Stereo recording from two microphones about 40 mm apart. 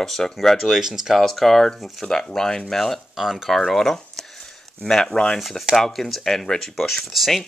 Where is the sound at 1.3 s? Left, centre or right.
Centre.